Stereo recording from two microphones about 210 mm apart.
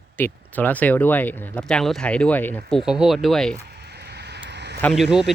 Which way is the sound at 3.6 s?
50° right (ahead or behind).